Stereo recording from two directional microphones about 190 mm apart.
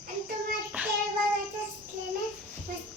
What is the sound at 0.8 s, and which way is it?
Child singing, 10° right (ahead or behind).